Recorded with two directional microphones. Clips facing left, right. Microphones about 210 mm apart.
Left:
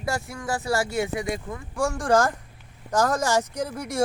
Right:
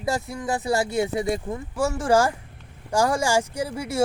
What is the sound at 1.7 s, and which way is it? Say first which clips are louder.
Speech: right 1 dB; 5° right (ahead or behind).